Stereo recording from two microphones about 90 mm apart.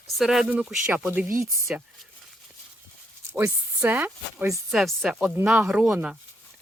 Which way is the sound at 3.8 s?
20° right (ahead or behind).